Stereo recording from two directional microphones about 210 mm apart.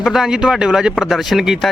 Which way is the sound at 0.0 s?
Centre (ahead or behind).